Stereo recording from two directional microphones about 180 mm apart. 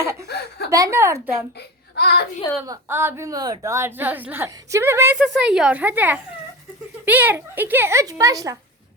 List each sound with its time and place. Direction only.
0.0 s a woman's voice: 15° right (ahead or behind)
0.3 s speech: 65° left (ahead or behind)
0.7 s a woman's voice: 15° right (ahead or behind)
2.0 s speech: 65° left (ahead or behind)
2.6 s a woman's voice: 15° right (ahead or behind)
5.2 s a woman's voice: centre (ahead or behind); by 8.5 s 20° right (ahead or behind)